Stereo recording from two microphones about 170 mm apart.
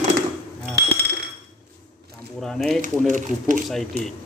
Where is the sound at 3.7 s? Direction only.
Centre (ahead or behind).